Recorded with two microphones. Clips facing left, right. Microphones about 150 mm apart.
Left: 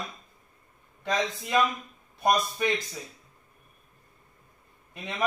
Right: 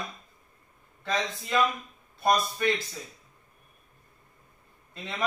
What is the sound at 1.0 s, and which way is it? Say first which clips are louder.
A man's voice: left 2 dB; 15° left (ahead or behind).